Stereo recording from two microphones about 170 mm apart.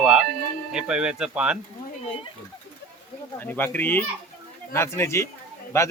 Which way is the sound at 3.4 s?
10° left (ahead or behind).